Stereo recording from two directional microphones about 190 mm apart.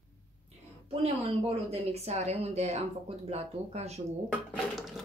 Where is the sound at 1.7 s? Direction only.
35° right (ahead or behind).